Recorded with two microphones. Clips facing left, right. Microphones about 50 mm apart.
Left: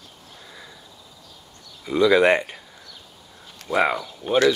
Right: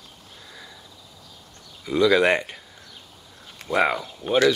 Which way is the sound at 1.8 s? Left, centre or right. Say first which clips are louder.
Left 2 dB; centre.